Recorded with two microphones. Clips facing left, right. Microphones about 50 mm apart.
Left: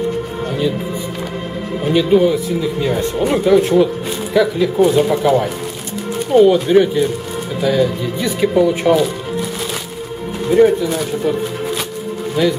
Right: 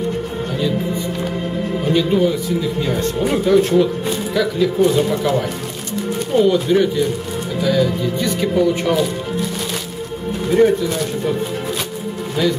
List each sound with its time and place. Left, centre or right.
1.9 s speech: centre
10.5 s speech: centre